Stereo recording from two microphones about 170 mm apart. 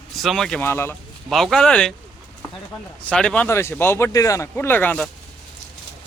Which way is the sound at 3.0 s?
5° left (ahead or behind).